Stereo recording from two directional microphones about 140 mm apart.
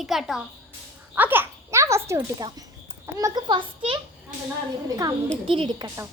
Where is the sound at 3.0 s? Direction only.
25° right (ahead or behind).